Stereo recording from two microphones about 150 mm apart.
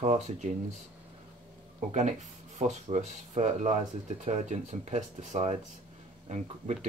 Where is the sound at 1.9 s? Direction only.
50° right (ahead or behind).